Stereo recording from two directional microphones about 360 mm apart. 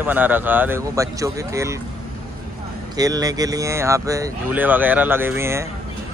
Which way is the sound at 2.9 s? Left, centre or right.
Centre.